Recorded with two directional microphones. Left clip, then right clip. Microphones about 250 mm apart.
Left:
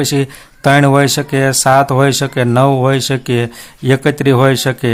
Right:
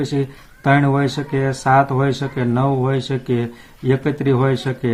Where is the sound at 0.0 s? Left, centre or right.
Left.